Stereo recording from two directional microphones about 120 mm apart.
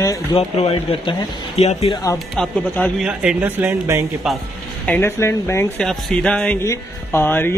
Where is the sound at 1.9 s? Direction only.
30° left (ahead or behind).